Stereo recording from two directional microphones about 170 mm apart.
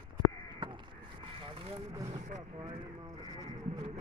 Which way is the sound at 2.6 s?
30° right (ahead or behind).